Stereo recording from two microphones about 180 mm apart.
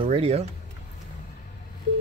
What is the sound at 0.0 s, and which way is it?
Speech, 35° right (ahead or behind).